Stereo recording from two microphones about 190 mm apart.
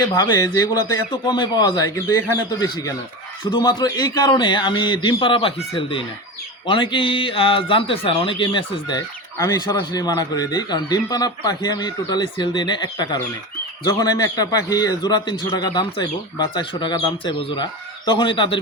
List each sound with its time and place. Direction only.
0.1 s speech: 20° left (ahead or behind)